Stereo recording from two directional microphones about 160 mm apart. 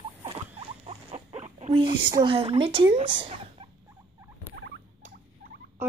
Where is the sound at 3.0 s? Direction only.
35° right (ahead or behind).